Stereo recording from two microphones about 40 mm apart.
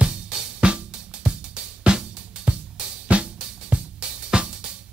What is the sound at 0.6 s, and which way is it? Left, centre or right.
Music, right.